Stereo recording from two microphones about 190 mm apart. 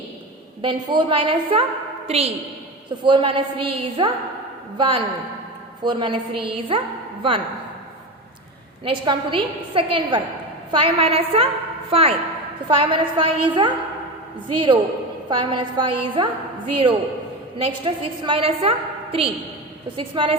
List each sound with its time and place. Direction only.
0.6 s a woman's voice: 25° right (ahead or behind)
8.8 s a woman's voice: 25° right (ahead or behind)
17.7 s a woman's voice: 25° right (ahead or behind)